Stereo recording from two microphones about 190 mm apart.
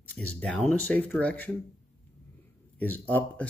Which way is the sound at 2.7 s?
10° left (ahead or behind).